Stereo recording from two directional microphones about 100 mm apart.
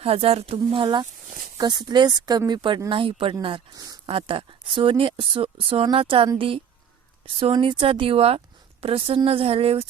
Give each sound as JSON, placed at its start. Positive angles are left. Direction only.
{"t": 0.0, "sound": "speech", "side_deg": -75}
{"t": 2.9, "sound": "speech", "side_deg": -60}
{"t": 7.3, "sound": "speech", "side_deg": -60}